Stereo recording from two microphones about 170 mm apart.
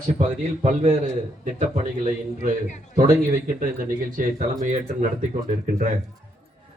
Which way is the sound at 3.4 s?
50° right (ahead or behind).